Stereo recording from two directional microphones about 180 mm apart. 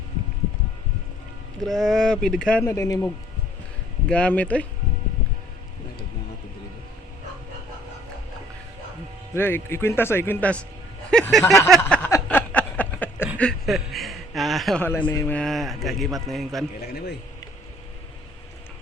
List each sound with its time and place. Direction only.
1.6 s a man's voice: centre (ahead or behind)
2.6 s speech: 20° left (ahead or behind)
4.1 s speech: 10° left (ahead or behind)
9.3 s a man's voice: 15° left (ahead or behind)
11.8 s a sound: 15° left (ahead or behind)
13.4 s a man's voice: centre (ahead or behind)
15.4 s a man's voice: centre (ahead or behind)